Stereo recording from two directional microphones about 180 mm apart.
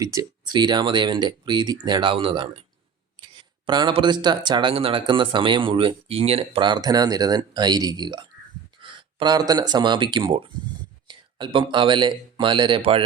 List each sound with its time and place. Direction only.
0.0 s speech: 20° right (ahead or behind)